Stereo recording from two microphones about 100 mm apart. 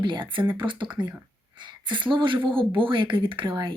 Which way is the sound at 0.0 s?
55° right (ahead or behind).